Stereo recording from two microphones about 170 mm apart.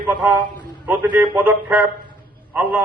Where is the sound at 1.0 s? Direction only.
10° right (ahead or behind).